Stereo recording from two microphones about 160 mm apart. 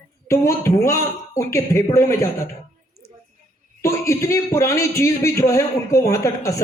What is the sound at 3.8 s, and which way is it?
A man's voice, 20° left (ahead or behind).